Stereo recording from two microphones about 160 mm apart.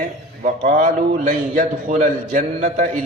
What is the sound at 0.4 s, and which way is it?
A man's voice, 50° right (ahead or behind).